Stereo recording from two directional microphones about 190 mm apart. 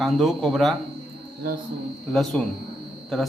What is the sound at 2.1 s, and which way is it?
Speech, centre (ahead or behind).